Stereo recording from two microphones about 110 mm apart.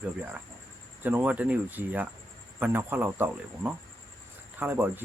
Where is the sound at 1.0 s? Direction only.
15° right (ahead or behind).